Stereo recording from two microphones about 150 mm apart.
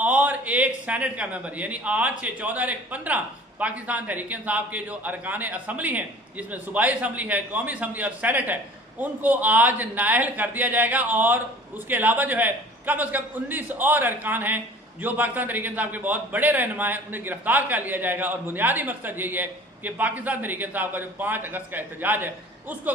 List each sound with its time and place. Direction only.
0.0 s a man's voice: 10° right (ahead or behind)